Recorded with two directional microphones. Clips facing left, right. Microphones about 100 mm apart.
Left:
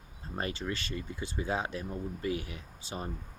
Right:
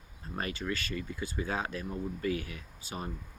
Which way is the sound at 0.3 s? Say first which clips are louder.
Even; 30° left (ahead or behind).